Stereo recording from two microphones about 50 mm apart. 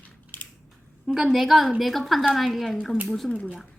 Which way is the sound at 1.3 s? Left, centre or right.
Centre.